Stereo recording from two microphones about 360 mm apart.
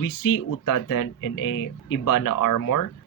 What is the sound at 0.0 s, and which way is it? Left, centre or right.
Speech, left.